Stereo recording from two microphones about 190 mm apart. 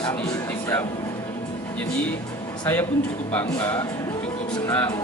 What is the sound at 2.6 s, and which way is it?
Speech, 10° left (ahead or behind).